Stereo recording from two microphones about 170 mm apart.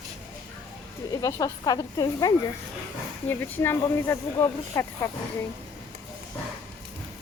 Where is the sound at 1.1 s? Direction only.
20° left (ahead or behind).